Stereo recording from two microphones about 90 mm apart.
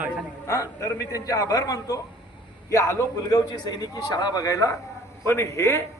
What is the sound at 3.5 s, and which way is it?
A man's voice, 45° left (ahead or behind).